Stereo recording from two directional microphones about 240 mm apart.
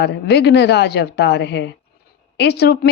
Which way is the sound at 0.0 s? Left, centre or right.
Left.